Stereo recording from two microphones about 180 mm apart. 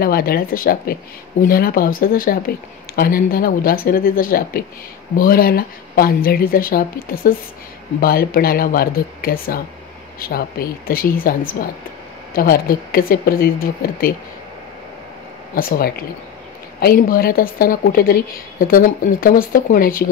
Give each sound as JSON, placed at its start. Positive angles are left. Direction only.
{"t": 0.0, "sound": "a woman's voice", "side_deg": 55}
{"t": 12.4, "sound": "speech", "side_deg": 55}
{"t": 15.5, "sound": "a woman's voice", "side_deg": 55}